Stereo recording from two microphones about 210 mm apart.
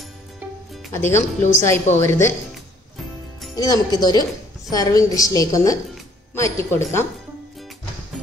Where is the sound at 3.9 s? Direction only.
20° left (ahead or behind).